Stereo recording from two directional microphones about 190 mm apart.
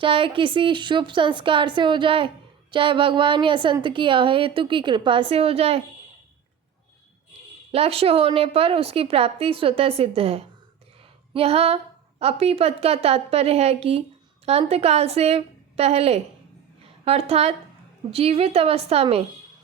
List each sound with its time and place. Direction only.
0.0 s a woman's voice: 25° right (ahead or behind)
7.7 s a woman's voice: 30° right (ahead or behind)